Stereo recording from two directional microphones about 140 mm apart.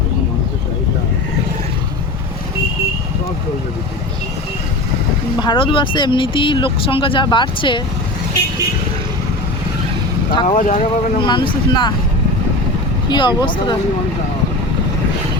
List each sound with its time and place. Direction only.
5.4 s speech: 35° left (ahead or behind)
10.4 s speech: 55° left (ahead or behind)
11.2 s speech: 35° left (ahead or behind)
13.1 s speech: 35° left (ahead or behind)